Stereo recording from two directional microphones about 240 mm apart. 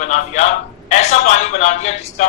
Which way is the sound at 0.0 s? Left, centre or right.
Left.